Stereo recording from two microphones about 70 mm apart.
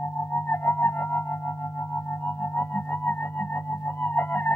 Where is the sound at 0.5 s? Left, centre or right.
Left.